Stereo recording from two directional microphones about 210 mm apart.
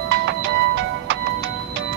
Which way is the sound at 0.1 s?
60° right (ahead or behind).